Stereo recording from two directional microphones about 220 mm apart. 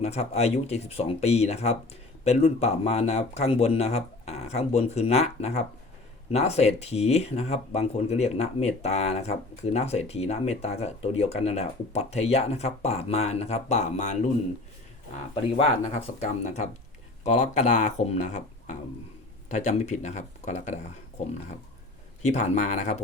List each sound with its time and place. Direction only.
0.0 s speech: 30° left (ahead or behind)
15.4 s speech: 25° left (ahead or behind)
19.5 s speech: 35° left (ahead or behind)
22.2 s speech: 30° left (ahead or behind)